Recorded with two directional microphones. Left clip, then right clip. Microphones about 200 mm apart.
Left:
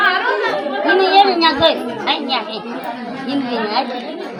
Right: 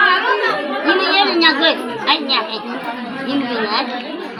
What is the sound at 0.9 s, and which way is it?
Chatter, 40° left (ahead or behind).